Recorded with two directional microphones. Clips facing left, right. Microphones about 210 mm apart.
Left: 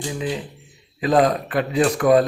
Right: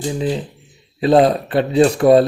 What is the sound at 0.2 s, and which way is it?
Speech, 35° right (ahead or behind).